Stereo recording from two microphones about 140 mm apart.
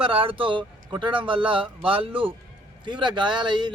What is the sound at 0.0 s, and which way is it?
A man's voice, 40° right (ahead or behind).